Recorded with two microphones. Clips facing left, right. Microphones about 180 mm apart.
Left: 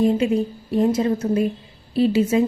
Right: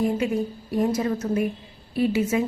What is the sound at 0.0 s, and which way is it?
A woman's voice, 20° left (ahead or behind).